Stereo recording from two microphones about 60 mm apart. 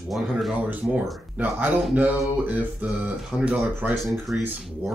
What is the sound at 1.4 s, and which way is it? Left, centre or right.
Speech, right.